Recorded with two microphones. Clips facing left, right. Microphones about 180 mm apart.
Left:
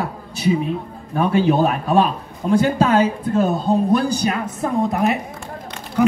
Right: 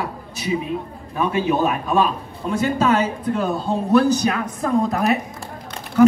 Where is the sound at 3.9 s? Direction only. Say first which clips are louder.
Right 2 dB; 10° left (ahead or behind).